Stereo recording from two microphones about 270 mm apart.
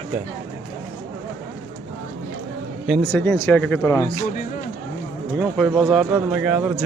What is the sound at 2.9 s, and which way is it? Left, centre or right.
Speech, centre.